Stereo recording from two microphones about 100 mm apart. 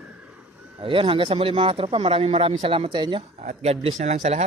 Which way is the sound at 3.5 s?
90° right.